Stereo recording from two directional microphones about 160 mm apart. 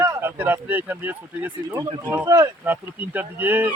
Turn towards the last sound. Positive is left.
turn(degrees=-10)  # may be behind; listen again after turning